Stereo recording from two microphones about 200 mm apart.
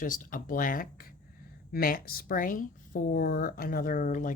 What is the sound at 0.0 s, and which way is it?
Speech, 40° left (ahead or behind).